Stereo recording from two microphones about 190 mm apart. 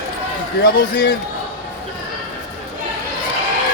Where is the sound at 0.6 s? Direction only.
55° left (ahead or behind).